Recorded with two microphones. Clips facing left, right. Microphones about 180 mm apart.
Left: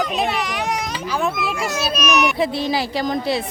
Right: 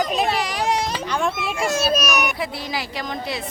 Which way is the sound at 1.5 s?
25° right (ahead or behind).